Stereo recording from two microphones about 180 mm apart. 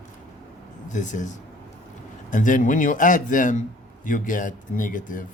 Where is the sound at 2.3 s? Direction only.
45° left (ahead or behind).